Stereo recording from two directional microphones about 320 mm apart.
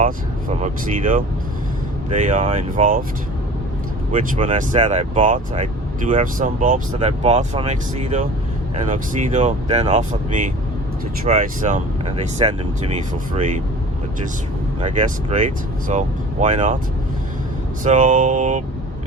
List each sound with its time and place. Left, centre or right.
0.0 s speech: right
4.1 s speech: right
14.8 s speech: right
17.8 s speech: right